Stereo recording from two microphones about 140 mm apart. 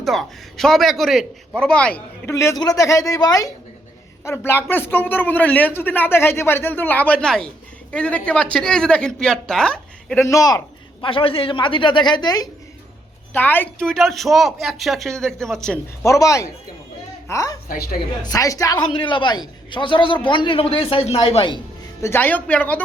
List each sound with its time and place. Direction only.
0.0 s a man's voice: centre (ahead or behind)
10.2 s a woman's voice: 20° left (ahead or behind)
11.0 s speech: 40° left (ahead or behind)
13.3 s a woman's voice: 15° left (ahead or behind)
16.0 s a woman's voice: 20° left (ahead or behind)
17.7 s a woman's voice: 90° left
18.2 s a woman's voice: 25° left (ahead or behind)
18.9 s speech: 35° left (ahead or behind)
22.0 s a man's voice: 15° left (ahead or behind)